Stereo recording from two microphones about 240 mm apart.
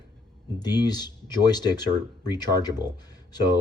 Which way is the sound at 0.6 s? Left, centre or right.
Centre.